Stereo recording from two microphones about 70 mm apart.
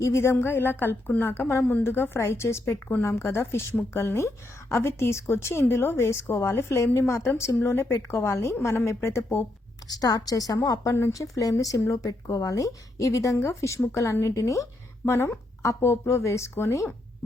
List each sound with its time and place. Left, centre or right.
0.0 s a woman's voice: left
9.8 s a woman's voice: left